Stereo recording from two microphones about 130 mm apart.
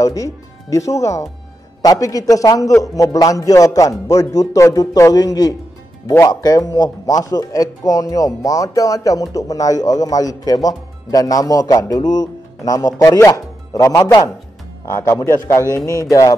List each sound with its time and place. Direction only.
0.0 s a man's voice: 25° left (ahead or behind)